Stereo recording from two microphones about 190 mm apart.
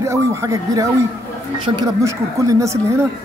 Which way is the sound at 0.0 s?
15° right (ahead or behind).